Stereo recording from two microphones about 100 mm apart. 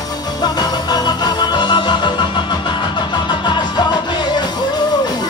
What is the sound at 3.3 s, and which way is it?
Music, 50° left (ahead or behind).